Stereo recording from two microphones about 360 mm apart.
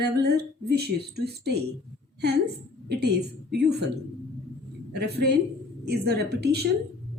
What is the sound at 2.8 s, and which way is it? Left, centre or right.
Speech, right.